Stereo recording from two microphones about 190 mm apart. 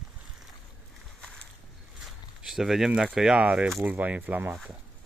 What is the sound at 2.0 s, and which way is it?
Speech, centre (ahead or behind).